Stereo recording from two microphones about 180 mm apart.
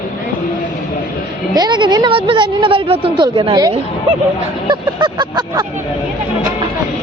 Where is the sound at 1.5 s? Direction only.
25° right (ahead or behind).